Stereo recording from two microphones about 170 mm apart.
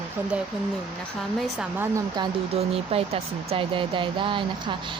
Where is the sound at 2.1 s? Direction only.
30° right (ahead or behind).